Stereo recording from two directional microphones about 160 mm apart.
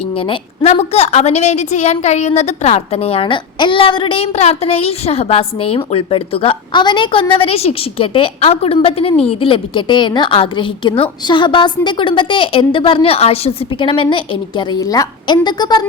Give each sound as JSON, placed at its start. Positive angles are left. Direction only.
{"t": 0.2, "sound": "a woman's voice", "side_deg": 35}